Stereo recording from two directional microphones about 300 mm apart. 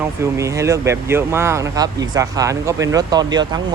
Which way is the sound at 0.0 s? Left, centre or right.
Centre.